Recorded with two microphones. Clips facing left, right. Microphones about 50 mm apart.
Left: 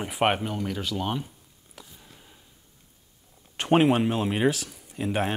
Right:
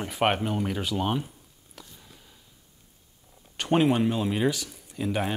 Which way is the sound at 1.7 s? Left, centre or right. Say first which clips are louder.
Even; centre.